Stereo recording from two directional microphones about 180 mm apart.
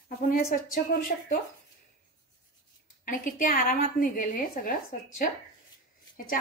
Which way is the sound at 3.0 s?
50° left (ahead or behind).